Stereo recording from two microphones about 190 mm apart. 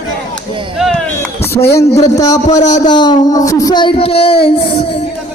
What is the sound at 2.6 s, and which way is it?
Speech, 40° left (ahead or behind).